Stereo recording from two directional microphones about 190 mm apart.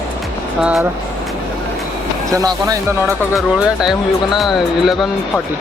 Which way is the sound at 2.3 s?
15° right (ahead or behind).